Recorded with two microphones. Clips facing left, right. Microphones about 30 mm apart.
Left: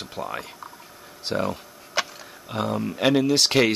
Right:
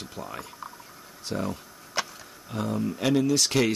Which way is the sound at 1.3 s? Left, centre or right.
Left.